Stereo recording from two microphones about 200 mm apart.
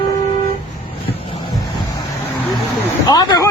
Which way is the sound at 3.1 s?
20° left (ahead or behind).